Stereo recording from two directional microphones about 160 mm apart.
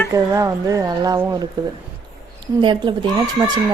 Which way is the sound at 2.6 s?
30° right (ahead or behind).